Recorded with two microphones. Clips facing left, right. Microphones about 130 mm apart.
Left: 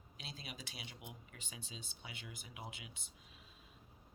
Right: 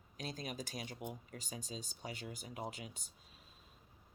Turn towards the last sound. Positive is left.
turn(degrees=-40)  # may be behind; listen again after turning